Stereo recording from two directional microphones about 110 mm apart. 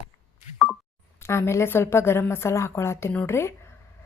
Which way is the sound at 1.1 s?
25° left (ahead or behind).